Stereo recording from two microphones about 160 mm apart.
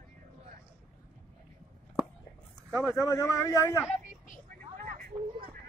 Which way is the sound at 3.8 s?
55° left (ahead or behind).